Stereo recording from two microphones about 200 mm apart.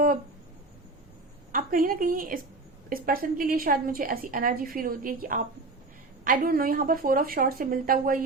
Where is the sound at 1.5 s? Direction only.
45° right (ahead or behind).